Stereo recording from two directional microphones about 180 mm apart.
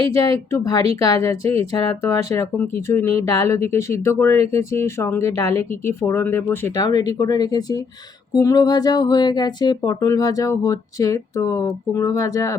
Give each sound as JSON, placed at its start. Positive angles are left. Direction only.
{"t": 0.1, "sound": "speech", "side_deg": 20}